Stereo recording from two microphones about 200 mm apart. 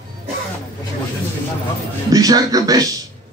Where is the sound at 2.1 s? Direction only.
20° right (ahead or behind).